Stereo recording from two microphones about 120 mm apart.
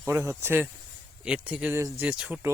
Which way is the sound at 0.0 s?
20° right (ahead or behind).